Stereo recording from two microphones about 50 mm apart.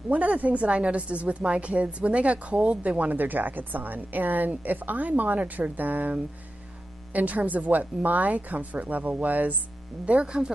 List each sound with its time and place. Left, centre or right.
0.1 s a woman's voice: right
10.0 s speech: right